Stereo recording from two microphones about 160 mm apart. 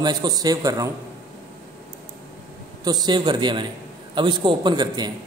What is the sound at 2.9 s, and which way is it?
A man's voice, 25° right (ahead or behind).